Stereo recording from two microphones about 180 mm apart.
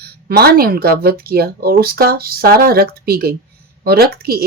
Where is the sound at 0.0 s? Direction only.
60° right (ahead or behind).